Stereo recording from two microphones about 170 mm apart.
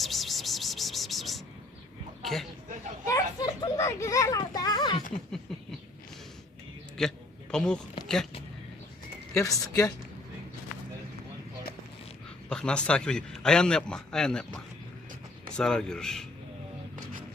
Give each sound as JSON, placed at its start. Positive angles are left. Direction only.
{"t": 0.0, "sound": "a sound", "side_deg": 0}
{"t": 2.2, "sound": "speech", "side_deg": 0}
{"t": 3.1, "sound": "children playing", "side_deg": 20}
{"t": 7.0, "sound": "a man's voice", "side_deg": 0}
{"t": 8.0, "sound": "a sound", "side_deg": 5}
{"t": 9.3, "sound": "speech", "side_deg": 20}
{"t": 12.5, "sound": "a man's voice", "side_deg": 5}